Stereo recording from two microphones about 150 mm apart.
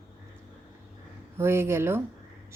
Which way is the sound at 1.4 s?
15° right (ahead or behind).